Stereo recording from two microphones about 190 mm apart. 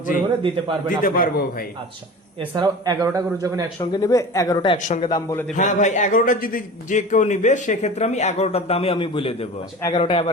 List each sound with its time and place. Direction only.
0.9 s a man's voice: 45° left (ahead or behind)
2.6 s a man's voice: 20° right (ahead or behind)
3.8 s speech: 20° left (ahead or behind)
5.5 s a man's voice: 40° left (ahead or behind)